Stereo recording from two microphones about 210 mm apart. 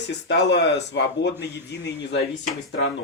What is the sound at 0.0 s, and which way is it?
A man's voice, 55° left (ahead or behind).